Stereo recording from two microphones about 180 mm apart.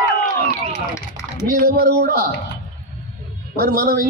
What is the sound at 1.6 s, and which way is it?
Speech, 60° right (ahead or behind).